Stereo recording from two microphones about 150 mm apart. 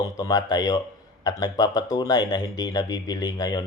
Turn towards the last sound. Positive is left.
turn(degrees=25)  # may be behind; listen again after turning